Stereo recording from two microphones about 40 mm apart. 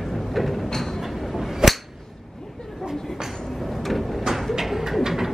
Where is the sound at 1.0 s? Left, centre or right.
Centre.